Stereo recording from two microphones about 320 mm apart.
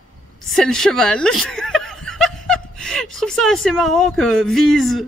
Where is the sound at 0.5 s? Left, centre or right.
Centre.